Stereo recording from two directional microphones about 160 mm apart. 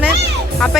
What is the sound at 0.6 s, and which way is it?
Speech, centre (ahead or behind).